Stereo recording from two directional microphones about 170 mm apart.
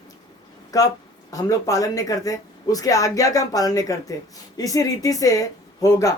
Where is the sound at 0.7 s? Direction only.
20° left (ahead or behind).